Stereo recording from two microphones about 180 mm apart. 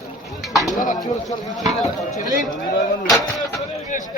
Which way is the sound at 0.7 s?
45° left (ahead or behind).